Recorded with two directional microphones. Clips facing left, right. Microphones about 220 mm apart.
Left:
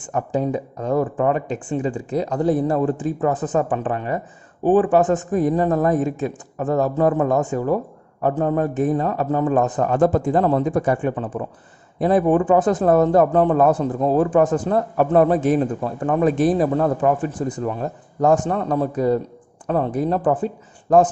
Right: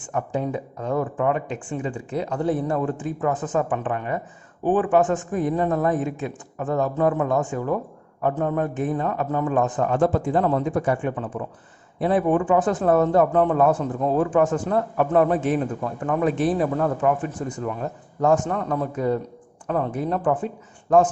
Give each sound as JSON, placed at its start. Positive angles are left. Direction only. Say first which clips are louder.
{"t": 0.1, "sound": "speech", "louder": "left 4 dB", "side_deg": 35}